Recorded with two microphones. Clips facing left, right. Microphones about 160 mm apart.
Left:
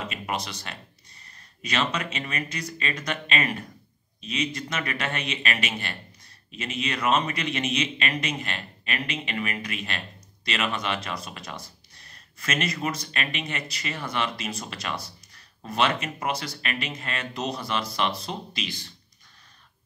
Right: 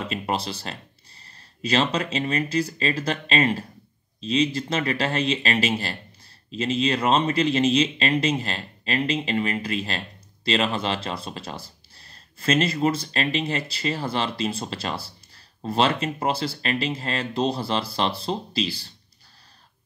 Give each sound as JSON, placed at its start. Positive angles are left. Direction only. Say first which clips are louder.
{"t": 0.1, "sound": "a man's voice", "louder": "right 5 dB", "side_deg": -30}